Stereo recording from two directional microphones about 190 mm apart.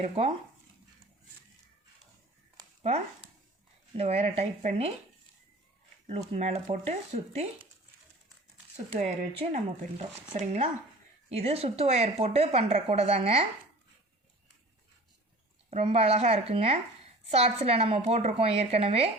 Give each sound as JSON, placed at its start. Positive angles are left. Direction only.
{"t": 0.0, "sound": "a woman's voice", "side_deg": -30}
{"t": 3.9, "sound": "a woman's voice", "side_deg": -30}
{"t": 6.1, "sound": "a woman's voice", "side_deg": -35}
{"t": 8.7, "sound": "a woman's voice", "side_deg": -40}
{"t": 15.7, "sound": "a woman's voice", "side_deg": -35}